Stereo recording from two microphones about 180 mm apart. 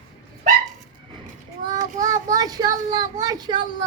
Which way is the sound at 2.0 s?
20° right (ahead or behind).